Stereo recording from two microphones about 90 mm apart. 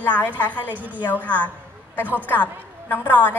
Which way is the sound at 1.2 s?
15° left (ahead or behind).